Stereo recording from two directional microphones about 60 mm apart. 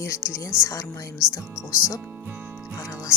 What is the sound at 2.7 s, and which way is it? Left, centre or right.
Music, left.